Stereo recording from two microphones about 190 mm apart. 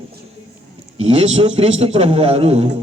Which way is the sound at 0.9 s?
35° right (ahead or behind).